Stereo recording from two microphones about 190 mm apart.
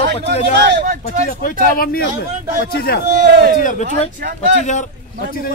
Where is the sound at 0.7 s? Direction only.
65° right (ahead or behind).